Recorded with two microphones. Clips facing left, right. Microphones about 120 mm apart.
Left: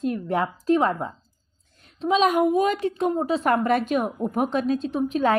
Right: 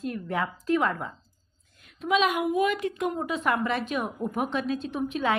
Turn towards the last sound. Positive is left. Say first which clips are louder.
# left 5 dB
turn(degrees=40)  # may be behind; listen again after turning